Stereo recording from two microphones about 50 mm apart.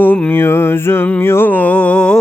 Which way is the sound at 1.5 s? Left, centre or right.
Left.